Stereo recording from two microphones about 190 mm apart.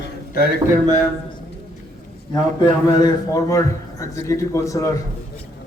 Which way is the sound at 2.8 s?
20° left (ahead or behind).